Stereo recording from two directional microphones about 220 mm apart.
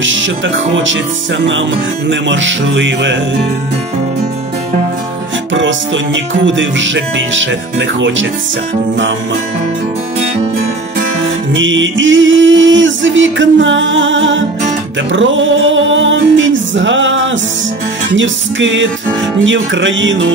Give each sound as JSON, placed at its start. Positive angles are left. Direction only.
{"t": 0.0, "sound": "music", "side_deg": -60}
{"t": 2.0, "sound": "music", "side_deg": -55}
{"t": 5.5, "sound": "music", "side_deg": -60}
{"t": 11.5, "sound": "music", "side_deg": -60}